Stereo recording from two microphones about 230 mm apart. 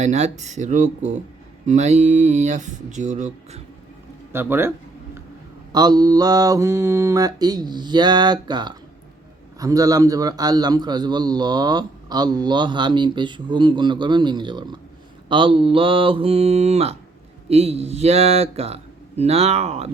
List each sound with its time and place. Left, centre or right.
0.0 s speech: right
4.3 s speech: centre
5.7 s a man's voice: centre